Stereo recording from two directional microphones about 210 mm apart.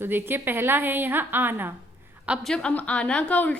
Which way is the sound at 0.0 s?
10° right (ahead or behind).